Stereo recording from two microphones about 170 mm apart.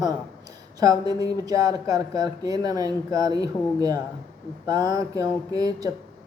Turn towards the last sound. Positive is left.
turn(degrees=-20)  # may be behind; listen again after turning